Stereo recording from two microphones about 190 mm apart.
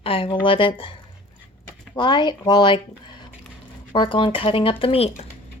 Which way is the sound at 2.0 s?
25° left (ahead or behind).